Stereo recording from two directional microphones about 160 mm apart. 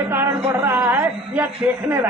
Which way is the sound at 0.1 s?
15° right (ahead or behind).